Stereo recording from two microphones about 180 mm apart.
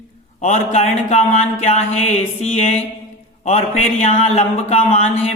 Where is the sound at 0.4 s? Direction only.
40° left (ahead or behind).